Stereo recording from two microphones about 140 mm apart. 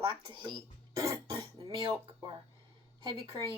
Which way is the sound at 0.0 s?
35° right (ahead or behind).